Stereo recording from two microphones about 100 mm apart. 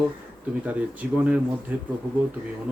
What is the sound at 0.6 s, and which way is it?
Speech, 15° right (ahead or behind).